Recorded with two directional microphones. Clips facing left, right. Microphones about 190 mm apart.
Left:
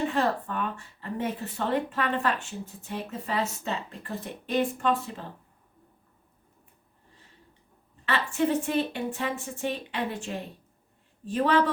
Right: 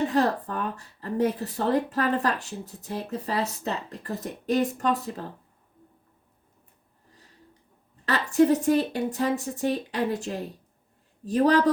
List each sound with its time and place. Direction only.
0.1 s speech: 40° right (ahead or behind)
8.0 s speech: 40° right (ahead or behind)